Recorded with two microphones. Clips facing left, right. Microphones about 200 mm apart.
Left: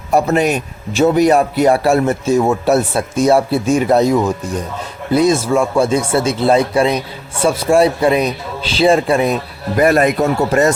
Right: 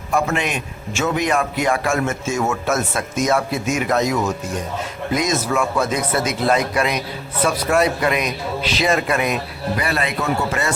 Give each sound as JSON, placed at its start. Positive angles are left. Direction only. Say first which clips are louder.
{"t": 0.1, "sound": "a man's voice", "louder": "left 7 dB", "side_deg": 40}
{"t": 9.7, "sound": "a man's voice", "louder": "left 12 dB", "side_deg": 45}